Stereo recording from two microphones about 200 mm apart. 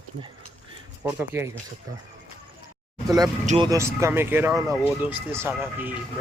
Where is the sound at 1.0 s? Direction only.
15° right (ahead or behind).